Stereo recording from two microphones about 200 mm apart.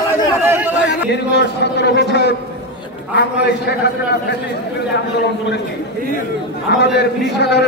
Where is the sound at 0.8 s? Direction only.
60° left (ahead or behind).